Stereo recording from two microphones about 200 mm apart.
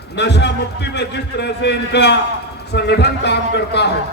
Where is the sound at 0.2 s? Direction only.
60° left (ahead or behind).